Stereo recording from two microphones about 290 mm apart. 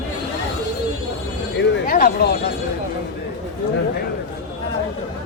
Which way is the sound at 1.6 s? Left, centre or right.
Left.